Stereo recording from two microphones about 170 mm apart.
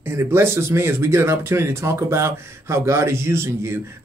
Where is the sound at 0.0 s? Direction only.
15° right (ahead or behind).